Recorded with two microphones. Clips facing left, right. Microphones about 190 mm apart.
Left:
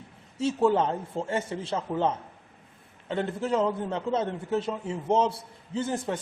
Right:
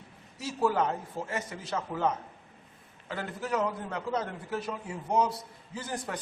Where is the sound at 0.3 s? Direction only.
25° left (ahead or behind).